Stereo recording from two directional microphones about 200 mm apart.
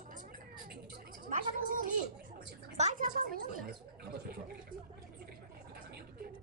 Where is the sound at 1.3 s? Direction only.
40° right (ahead or behind).